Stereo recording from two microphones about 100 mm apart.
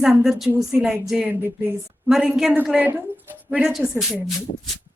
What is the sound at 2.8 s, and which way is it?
Speech, 20° right (ahead or behind).